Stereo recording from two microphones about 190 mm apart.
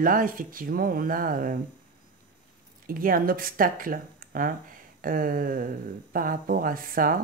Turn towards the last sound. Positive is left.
turn(degrees=-45)  # may be behind; listen again after turning